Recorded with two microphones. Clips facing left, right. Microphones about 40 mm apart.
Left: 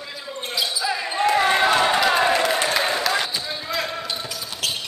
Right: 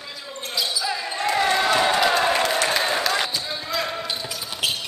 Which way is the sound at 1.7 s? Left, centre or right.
Centre.